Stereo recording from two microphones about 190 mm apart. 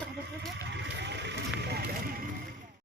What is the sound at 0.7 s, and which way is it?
Speech, 65° right (ahead or behind).